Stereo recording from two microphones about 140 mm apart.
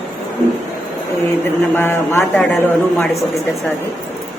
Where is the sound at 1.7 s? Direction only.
15° left (ahead or behind).